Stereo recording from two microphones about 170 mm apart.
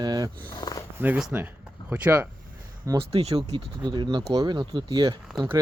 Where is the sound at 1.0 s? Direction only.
10° right (ahead or behind).